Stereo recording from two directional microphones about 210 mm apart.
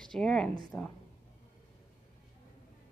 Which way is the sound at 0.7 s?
15° left (ahead or behind).